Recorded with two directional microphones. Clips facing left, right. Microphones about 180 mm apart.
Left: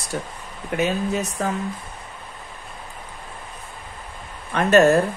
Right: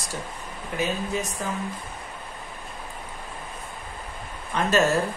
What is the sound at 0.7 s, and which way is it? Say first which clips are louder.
Speech: left 6 dB; 65° left (ahead or behind).